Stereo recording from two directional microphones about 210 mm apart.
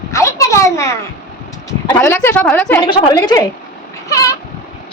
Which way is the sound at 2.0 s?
10° left (ahead or behind).